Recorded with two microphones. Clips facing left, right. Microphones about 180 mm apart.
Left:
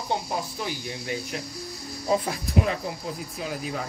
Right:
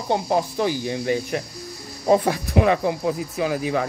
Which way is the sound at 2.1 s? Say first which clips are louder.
Right 7 dB; 75° right (ahead or behind).